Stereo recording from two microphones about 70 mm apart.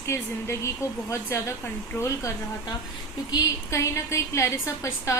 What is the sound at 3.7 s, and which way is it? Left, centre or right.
A woman's voice, left.